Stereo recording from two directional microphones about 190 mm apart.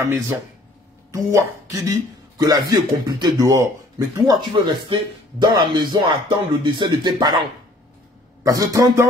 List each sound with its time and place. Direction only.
1.1 s speech: 20° right (ahead or behind)
8.5 s a man's voice: 20° right (ahead or behind)